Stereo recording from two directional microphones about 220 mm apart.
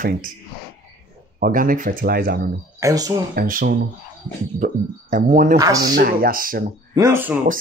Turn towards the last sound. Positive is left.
turn(degrees=-10)  # may be behind; listen again after turning